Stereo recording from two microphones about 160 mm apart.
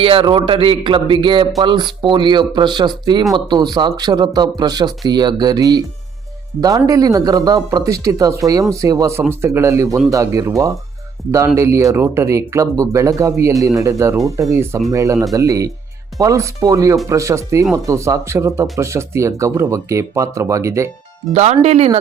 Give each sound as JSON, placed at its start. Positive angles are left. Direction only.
{"t": 0.0, "sound": "a man's voice", "side_deg": -35}
{"t": 21.3, "sound": "speech", "side_deg": -45}